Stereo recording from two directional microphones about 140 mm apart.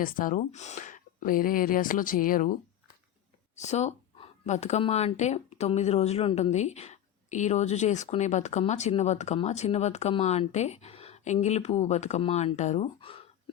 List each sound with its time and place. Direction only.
0.0 s speech: 80° left
3.5 s a sound: 55° left (ahead or behind)
4.8 s a woman's voice: 50° left (ahead or behind)